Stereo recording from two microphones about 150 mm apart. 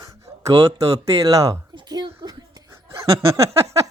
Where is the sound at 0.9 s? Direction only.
20° right (ahead or behind).